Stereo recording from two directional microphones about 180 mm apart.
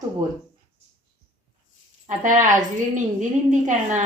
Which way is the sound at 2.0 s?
45° right (ahead or behind).